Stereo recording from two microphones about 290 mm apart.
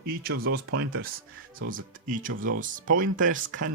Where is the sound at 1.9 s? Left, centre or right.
Right.